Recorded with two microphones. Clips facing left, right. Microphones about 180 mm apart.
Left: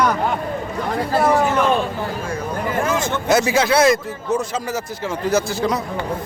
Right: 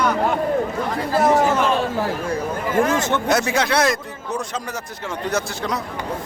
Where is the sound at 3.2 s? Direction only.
Centre (ahead or behind).